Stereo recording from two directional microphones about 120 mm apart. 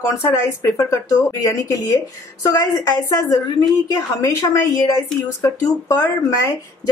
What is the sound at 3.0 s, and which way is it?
Speech, 25° left (ahead or behind).